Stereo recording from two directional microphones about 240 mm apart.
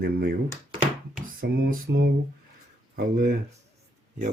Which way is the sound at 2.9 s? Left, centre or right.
Right.